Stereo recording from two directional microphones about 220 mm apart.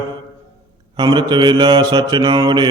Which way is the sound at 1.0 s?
20° right (ahead or behind).